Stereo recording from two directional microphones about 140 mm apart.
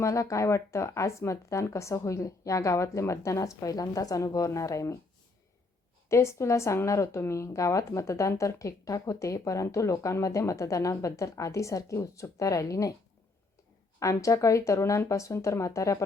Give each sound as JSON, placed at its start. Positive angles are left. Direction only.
{"t": 0.0, "sound": "speech", "side_deg": 20}
{"t": 6.1, "sound": "speech", "side_deg": 20}
{"t": 14.0, "sound": "speech", "side_deg": 20}